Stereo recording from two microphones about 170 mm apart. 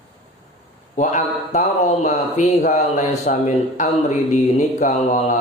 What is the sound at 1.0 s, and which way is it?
Speech, 45° left (ahead or behind).